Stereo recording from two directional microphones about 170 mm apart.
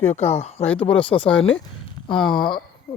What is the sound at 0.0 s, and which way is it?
Speech, 40° left (ahead or behind).